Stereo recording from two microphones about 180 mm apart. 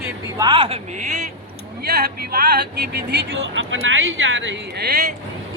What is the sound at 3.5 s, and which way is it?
Speech, 90° right.